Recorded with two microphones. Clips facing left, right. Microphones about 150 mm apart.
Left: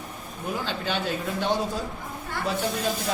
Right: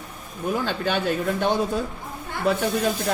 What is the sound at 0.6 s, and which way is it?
Speech, 50° right (ahead or behind).